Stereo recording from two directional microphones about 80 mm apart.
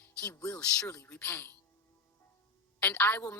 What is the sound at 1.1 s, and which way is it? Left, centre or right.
Speech, centre.